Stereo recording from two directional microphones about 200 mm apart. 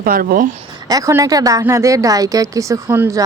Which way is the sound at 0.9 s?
15° right (ahead or behind).